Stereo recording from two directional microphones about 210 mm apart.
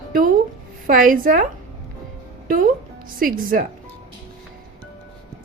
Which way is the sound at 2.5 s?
40° right (ahead or behind).